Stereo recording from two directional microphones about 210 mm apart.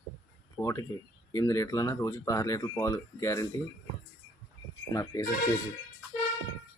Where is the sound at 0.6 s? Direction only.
15° left (ahead or behind).